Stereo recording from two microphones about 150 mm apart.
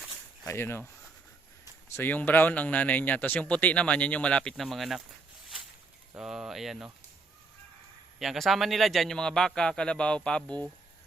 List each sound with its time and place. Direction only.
0.4 s speech: 15° left (ahead or behind)
1.9 s speech: 15° left (ahead or behind)
6.1 s a man's voice: 5° right (ahead or behind)
8.2 s a man's voice: centre (ahead or behind)